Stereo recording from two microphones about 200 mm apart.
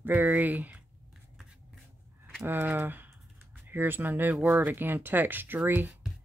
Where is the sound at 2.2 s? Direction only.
10° right (ahead or behind).